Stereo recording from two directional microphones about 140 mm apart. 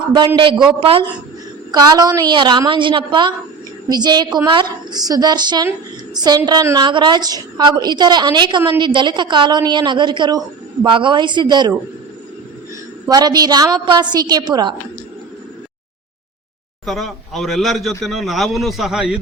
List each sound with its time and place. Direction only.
0.7 s a woman's voice: 40° right (ahead or behind)
1.7 s a woman's voice: 30° right (ahead or behind)
13.1 s a woman's voice: 30° right (ahead or behind)
16.8 s speech: centre (ahead or behind)